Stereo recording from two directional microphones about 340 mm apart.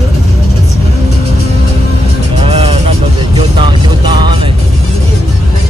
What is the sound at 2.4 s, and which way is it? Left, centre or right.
Music, centre.